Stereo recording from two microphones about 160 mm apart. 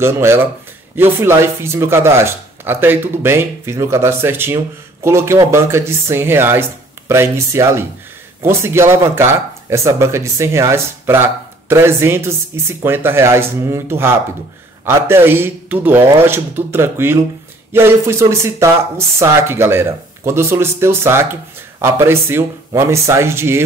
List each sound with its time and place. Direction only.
0.0 s speech: 15° right (ahead or behind)